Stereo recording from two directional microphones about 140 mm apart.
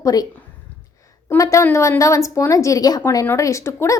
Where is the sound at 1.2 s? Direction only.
20° left (ahead or behind).